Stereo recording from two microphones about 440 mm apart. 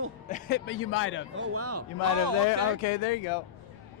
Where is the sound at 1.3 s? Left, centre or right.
Right.